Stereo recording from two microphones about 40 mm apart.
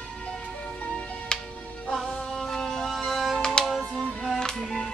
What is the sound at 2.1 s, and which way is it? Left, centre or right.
Music, centre.